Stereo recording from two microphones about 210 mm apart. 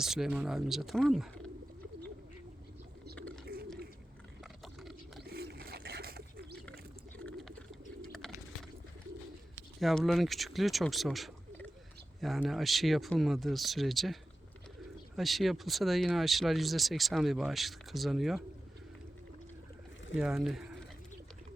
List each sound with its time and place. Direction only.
0.0 s speech: centre (ahead or behind)
3.2 s bird: 5° left (ahead or behind)
3.4 s bird: 45° right (ahead or behind)
4.6 s a sound: centre (ahead or behind)
5.2 s pigeon: 50° right (ahead or behind)
7.3 s pigeon: centre (ahead or behind)
9.8 s speech: centre (ahead or behind)
20.1 s speech: 5° right (ahead or behind)